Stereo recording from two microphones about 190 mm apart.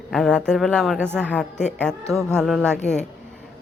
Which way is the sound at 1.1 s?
10° right (ahead or behind).